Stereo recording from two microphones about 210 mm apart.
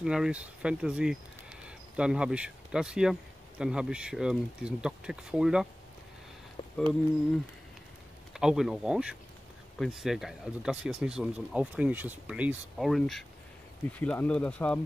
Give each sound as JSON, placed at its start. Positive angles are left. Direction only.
{"t": 0.0, "sound": "speech", "side_deg": -5}
{"t": 6.6, "sound": "a sound", "side_deg": 25}
{"t": 8.3, "sound": "speech", "side_deg": 0}